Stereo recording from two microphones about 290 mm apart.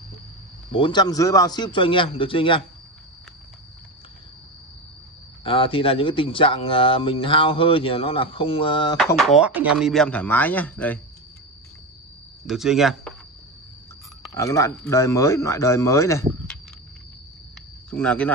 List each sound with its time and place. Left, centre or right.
0.7 s speech: centre
5.4 s speech: centre
8.9 s speech: centre
12.4 s speech: centre
14.3 s speech: centre
17.8 s speech: centre